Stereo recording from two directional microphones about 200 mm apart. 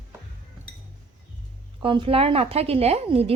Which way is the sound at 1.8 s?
25° right (ahead or behind).